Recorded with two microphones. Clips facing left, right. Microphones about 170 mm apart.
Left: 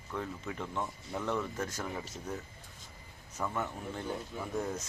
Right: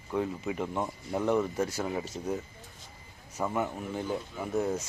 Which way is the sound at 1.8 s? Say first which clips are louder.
Right 7 dB; 20° right (ahead or behind).